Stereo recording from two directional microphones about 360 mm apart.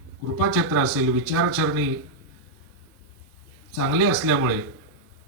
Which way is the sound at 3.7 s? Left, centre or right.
Right.